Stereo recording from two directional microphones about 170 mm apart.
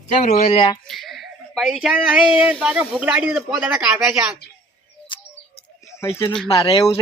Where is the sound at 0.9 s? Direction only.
Centre (ahead or behind).